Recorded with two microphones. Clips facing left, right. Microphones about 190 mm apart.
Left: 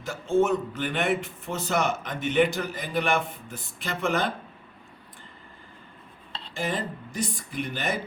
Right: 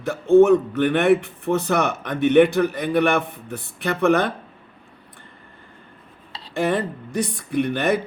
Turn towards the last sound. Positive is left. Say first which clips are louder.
# right 10 dB
turn(degrees=-60)  # may be behind; listen again after turning